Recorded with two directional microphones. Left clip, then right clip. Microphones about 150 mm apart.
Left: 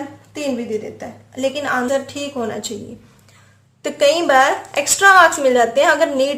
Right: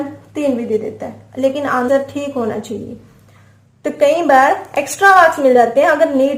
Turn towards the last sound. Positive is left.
turn(degrees=30)  # may be behind; listen again after turning